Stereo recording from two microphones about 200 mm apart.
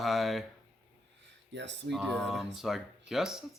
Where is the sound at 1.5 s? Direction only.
60° right (ahead or behind).